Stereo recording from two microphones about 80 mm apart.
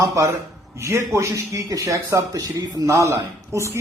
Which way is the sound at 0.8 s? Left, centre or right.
Right.